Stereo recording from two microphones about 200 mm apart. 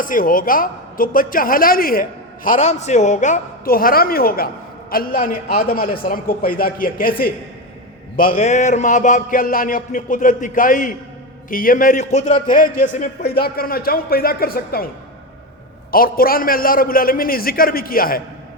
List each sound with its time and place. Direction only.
0.0 s a woman's voice: 45° left (ahead or behind)
8.1 s music: 45° left (ahead or behind)
11.4 s a woman's voice: 45° left (ahead or behind)
15.9 s a woman's voice: 45° left (ahead or behind)